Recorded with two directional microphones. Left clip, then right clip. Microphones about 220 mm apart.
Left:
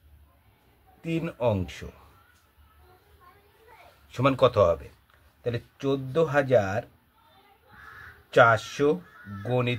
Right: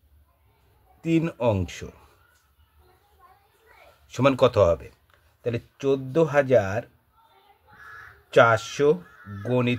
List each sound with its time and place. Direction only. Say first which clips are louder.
1.0 s speech: right 4 dB; 35° right (ahead or behind)
4.1 s speech: right 2 dB; 35° right (ahead or behind)
8.3 s speech: right 1 dB; 35° right (ahead or behind)